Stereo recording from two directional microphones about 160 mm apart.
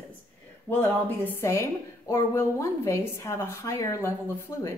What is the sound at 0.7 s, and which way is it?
A woman's voice, 10° left (ahead or behind).